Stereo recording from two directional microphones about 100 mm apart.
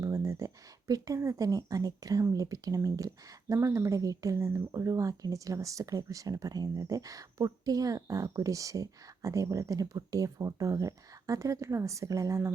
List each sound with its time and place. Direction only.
0.0 s speech: 35° right (ahead or behind)